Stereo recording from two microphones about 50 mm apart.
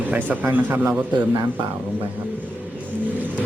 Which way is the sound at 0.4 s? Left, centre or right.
Right.